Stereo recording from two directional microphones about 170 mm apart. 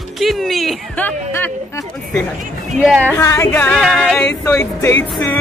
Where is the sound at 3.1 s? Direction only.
15° left (ahead or behind).